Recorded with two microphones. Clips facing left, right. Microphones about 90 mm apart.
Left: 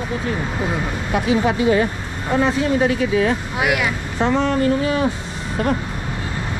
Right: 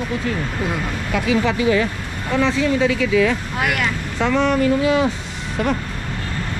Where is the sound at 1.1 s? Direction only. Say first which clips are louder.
Left 1 dB; 25° left (ahead or behind).